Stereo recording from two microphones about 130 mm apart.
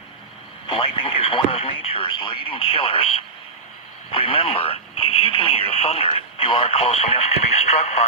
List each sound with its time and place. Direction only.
0.7 s speech: 45° left (ahead or behind); by 8.0 s 60° left (ahead or behind)